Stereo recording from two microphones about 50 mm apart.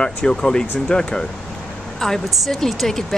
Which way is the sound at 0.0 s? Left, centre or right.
Centre.